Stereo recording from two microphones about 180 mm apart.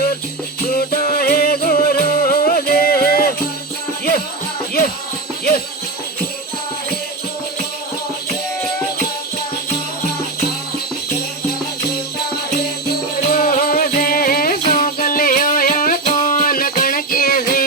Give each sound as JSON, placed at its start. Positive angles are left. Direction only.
{"t": 0.7, "sound": "music", "side_deg": 55}
{"t": 12.6, "sound": "music", "side_deg": 60}